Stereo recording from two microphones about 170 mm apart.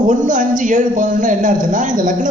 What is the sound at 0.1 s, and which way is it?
A man's voice, 50° right (ahead or behind).